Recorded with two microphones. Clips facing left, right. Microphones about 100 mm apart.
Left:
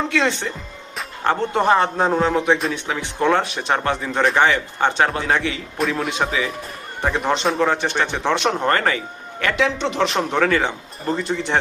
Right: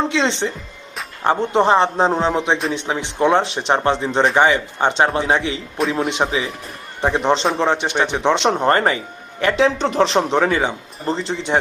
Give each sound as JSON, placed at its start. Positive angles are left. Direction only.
{"t": 0.1, "sound": "speech", "side_deg": -25}
{"t": 5.8, "sound": "a man's voice", "side_deg": 0}
{"t": 6.2, "sound": "a man's voice", "side_deg": -25}
{"t": 10.1, "sound": "speech", "side_deg": -25}